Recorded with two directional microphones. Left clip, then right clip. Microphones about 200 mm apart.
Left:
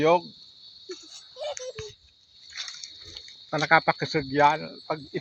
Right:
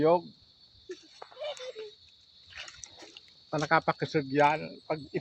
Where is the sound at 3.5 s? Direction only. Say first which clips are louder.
Left 6 dB; 10° left (ahead or behind).